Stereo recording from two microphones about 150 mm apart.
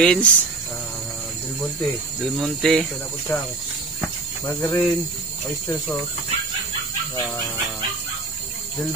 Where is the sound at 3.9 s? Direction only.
20° left (ahead or behind).